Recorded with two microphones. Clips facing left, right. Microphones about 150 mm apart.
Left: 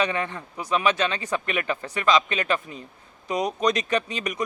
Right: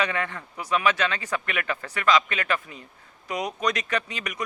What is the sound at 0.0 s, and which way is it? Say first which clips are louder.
Speech: left 2 dB; 20° left (ahead or behind).